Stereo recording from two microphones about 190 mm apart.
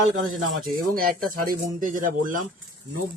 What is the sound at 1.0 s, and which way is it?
Speech, 50° right (ahead or behind).